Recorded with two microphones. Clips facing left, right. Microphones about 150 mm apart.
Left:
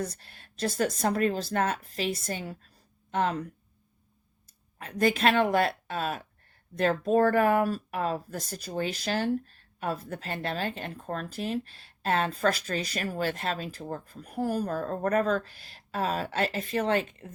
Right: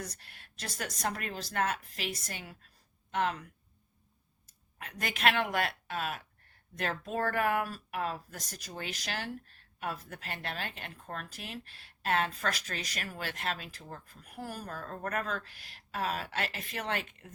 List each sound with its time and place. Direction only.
0.0 s speech: 30° left (ahead or behind)
4.4 s speech: 30° left (ahead or behind)